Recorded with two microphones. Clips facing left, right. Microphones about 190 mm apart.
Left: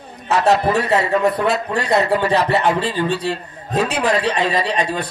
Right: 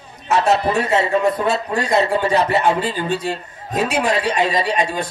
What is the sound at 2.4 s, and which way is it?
Speech, 35° left (ahead or behind).